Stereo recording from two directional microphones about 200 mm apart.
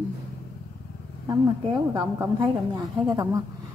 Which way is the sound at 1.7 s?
20° right (ahead or behind).